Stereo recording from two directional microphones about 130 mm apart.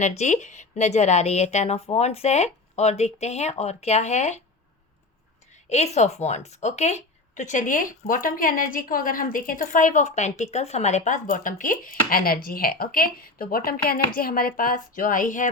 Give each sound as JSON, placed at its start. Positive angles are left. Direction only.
{"t": 0.0, "sound": "speech", "side_deg": 65}
{"t": 5.6, "sound": "a woman's voice", "side_deg": 60}
{"t": 14.3, "sound": "speech", "side_deg": 90}